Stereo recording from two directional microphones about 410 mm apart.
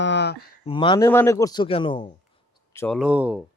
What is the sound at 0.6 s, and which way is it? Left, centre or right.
A man's voice, centre.